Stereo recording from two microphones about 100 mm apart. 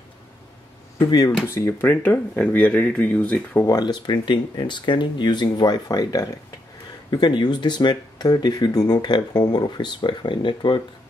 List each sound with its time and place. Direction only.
1.5 s speech: 25° left (ahead or behind)
3.6 s speech: 40° left (ahead or behind)
7.1 s speech: 50° left (ahead or behind)